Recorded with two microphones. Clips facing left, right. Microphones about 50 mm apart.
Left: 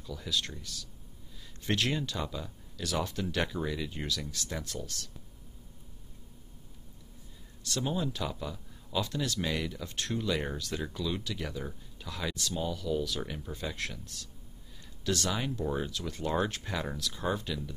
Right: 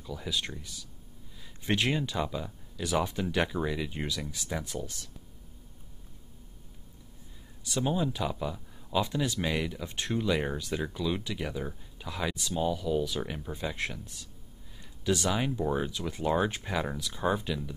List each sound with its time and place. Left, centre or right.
0.0 s speech: centre
7.6 s speech: centre